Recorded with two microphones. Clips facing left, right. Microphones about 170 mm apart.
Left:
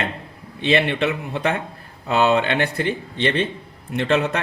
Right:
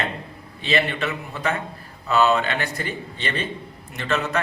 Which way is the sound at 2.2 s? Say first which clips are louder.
Left 3 dB; 60° left (ahead or behind).